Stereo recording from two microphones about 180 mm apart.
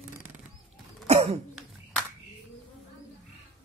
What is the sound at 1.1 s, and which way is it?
Cough, 35° right (ahead or behind).